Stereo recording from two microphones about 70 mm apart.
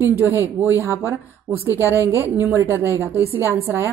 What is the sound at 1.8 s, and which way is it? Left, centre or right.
Speech, left.